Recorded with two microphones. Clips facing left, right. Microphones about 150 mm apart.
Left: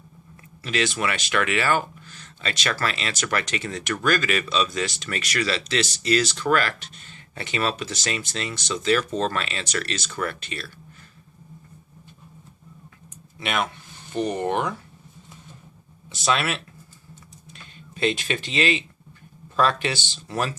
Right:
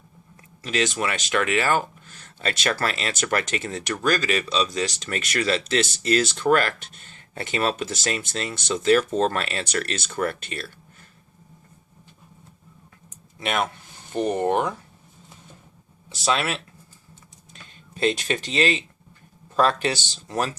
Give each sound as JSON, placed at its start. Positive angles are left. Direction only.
{"t": 0.6, "sound": "speech", "side_deg": -40}
{"t": 13.4, "sound": "speech", "side_deg": -40}
{"t": 16.0, "sound": "speech", "side_deg": -30}
{"t": 17.5, "sound": "typing", "side_deg": -40}
{"t": 18.2, "sound": "speech", "side_deg": -40}